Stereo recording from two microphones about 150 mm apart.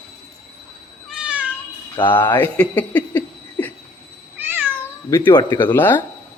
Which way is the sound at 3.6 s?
10° left (ahead or behind).